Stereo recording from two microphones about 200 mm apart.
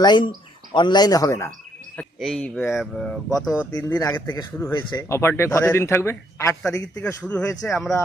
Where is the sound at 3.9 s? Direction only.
20° left (ahead or behind).